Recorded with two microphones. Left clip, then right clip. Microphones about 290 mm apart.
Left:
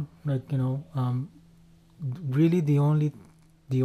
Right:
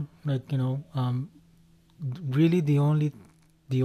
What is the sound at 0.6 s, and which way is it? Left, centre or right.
Speech, right.